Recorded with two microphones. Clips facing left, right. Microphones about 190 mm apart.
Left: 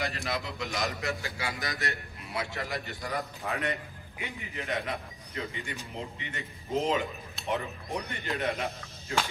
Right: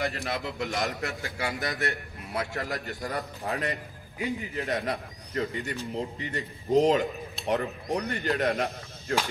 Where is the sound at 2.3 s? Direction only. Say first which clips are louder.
Right 3 dB; 45° right (ahead or behind).